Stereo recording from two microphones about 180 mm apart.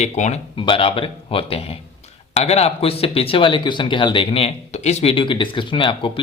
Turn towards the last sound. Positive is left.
turn(degrees=30)  # may be behind; listen again after turning